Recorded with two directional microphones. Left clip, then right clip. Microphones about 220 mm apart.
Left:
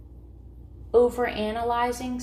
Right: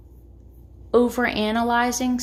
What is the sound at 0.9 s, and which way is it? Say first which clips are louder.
A woman's voice: right 1 dB; 50° right (ahead or behind).